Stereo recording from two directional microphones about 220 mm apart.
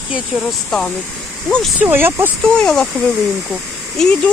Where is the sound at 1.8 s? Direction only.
10° right (ahead or behind).